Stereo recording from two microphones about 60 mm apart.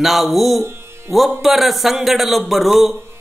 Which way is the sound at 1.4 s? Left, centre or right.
Centre.